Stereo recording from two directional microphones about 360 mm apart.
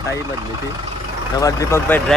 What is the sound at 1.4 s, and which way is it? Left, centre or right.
Speech, centre.